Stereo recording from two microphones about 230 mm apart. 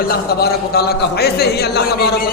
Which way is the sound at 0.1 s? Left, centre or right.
Left.